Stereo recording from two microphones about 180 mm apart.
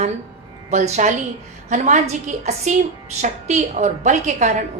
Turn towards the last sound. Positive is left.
turn(degrees=-40)  # may be behind; listen again after turning